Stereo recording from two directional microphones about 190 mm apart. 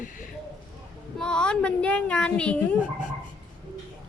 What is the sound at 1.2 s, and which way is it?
Speech, 5° left (ahead or behind).